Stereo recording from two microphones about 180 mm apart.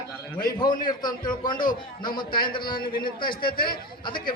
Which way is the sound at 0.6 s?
25° left (ahead or behind).